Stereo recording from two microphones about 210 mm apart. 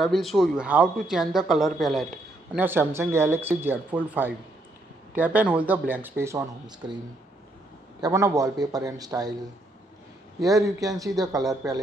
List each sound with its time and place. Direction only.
0.0 s speech: centre (ahead or behind)
2.5 s speech: 10° right (ahead or behind)
8.0 s speech: 15° right (ahead or behind)
10.4 s speech: 15° right (ahead or behind)